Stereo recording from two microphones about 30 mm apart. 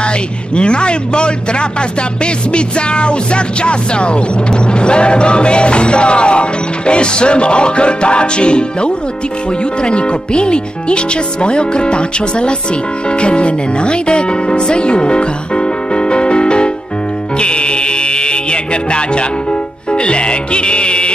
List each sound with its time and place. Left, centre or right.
0.6 s music: left
13.2 s speech: left
17.4 s music: left